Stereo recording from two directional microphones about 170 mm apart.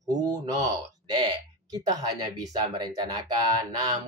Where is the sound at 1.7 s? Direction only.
20° right (ahead or behind).